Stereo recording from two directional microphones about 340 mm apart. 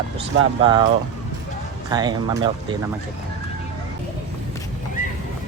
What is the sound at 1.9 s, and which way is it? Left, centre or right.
Speech, centre.